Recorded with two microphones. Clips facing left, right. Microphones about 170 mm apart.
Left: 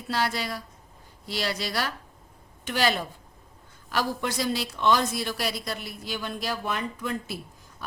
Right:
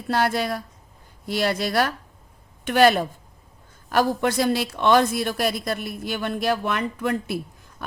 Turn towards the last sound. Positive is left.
turn(degrees=-60)  # may be behind; listen again after turning